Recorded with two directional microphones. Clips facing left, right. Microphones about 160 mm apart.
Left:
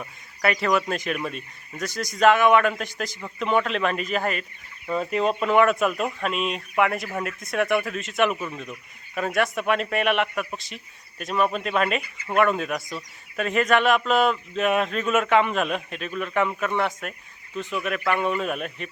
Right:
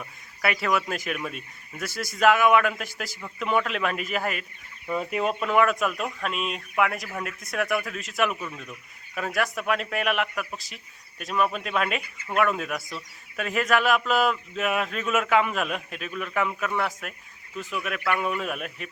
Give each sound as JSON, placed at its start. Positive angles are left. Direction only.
{"t": 0.4, "sound": "a man's voice", "side_deg": -5}
{"t": 4.9, "sound": "chicken", "side_deg": -10}
{"t": 5.4, "sound": "a man's voice", "side_deg": 0}
{"t": 8.3, "sound": "speech", "side_deg": 25}
{"t": 9.1, "sound": "a man's voice", "side_deg": 0}